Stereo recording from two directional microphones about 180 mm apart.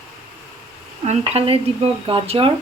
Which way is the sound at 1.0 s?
35° right (ahead or behind).